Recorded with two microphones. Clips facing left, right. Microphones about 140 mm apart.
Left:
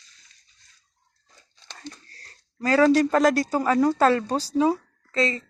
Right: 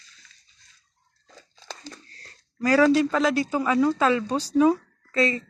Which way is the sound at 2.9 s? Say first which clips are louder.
Left 2 dB; 40° left (ahead or behind).